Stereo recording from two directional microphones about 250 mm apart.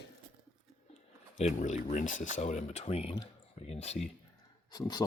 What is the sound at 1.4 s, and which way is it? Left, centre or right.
Speech, left.